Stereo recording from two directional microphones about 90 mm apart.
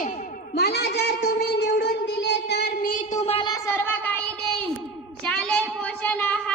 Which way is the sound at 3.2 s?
90° left.